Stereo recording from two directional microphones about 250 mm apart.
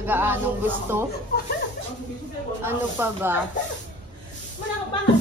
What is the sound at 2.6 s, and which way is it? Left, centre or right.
Speech, centre.